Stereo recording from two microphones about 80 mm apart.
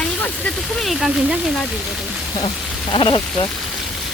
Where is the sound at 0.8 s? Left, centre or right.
Centre.